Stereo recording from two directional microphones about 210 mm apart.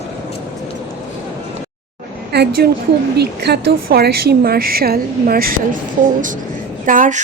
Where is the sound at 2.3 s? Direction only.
50° right (ahead or behind).